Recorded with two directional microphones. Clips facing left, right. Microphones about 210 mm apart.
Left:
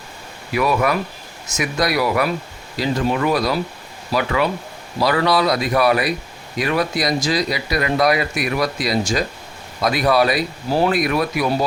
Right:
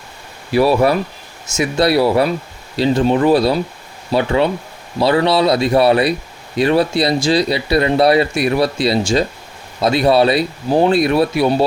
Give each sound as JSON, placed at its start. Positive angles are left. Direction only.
{"t": 0.5, "sound": "speech", "side_deg": -30}